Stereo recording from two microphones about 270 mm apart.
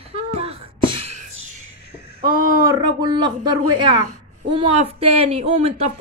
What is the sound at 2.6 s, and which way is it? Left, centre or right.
Speech, centre.